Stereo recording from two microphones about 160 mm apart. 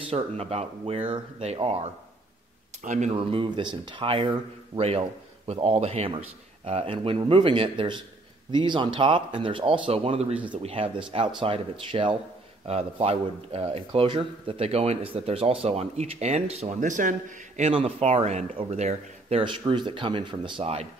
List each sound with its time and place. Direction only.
0.0 s a man's voice: 40° right (ahead or behind)
17.6 s a man's voice: 40° right (ahead or behind)